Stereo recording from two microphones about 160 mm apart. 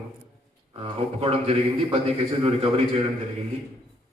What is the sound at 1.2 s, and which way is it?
A man's voice, 40° right (ahead or behind).